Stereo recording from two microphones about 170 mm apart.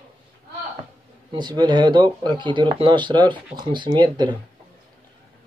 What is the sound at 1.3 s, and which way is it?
Speech, 25° right (ahead or behind).